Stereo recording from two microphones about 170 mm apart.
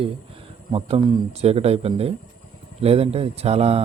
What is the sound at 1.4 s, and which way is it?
Speech, 35° right (ahead or behind).